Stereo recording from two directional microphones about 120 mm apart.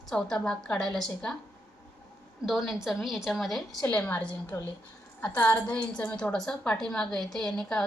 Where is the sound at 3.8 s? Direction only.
10° left (ahead or behind).